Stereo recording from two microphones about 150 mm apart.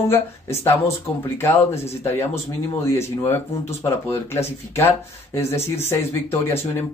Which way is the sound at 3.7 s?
45° left (ahead or behind).